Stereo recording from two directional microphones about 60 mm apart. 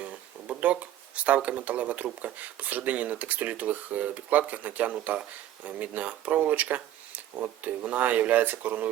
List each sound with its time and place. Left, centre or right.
0.0 s speech: right